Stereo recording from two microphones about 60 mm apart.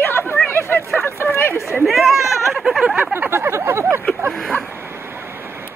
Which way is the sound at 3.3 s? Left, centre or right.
Right.